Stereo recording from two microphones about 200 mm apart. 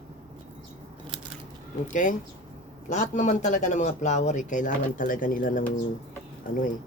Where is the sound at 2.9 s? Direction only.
35° left (ahead or behind).